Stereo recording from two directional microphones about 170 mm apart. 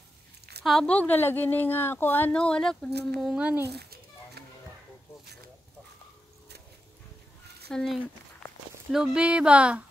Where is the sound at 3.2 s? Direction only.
5° right (ahead or behind).